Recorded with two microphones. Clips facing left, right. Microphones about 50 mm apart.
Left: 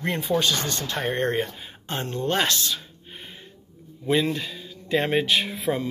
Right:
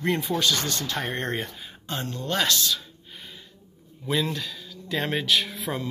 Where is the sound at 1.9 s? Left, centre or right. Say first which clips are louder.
Left 3 dB; left.